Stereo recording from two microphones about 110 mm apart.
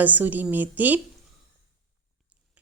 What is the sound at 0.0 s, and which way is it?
Speech, 15° right (ahead or behind).